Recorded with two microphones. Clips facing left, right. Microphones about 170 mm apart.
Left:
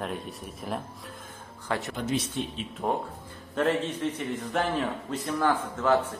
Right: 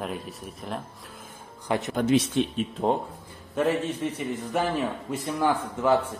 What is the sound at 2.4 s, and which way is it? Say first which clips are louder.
Speech: right 7 dB; 90° right.